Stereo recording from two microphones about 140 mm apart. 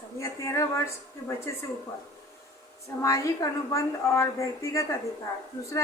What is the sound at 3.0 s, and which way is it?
Speech, 20° left (ahead or behind).